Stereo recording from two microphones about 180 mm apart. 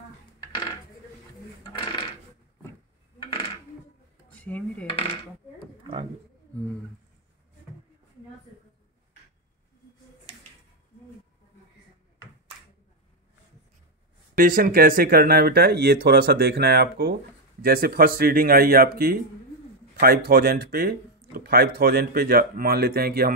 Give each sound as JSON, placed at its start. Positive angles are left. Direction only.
{"t": 1.6, "sound": "coin", "side_deg": 25}
{"t": 3.2, "sound": "dishes", "side_deg": 30}
{"t": 4.4, "sound": "dishes", "side_deg": 5}
{"t": 4.8, "sound": "dishes", "side_deg": 30}
{"t": 14.3, "sound": "speech", "side_deg": -50}
{"t": 20.2, "sound": "speech", "side_deg": -55}